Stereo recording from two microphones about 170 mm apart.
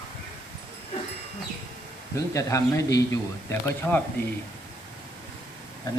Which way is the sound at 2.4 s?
20° left (ahead or behind).